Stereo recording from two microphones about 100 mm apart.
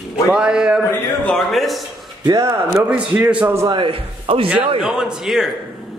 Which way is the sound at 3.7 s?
60° right (ahead or behind).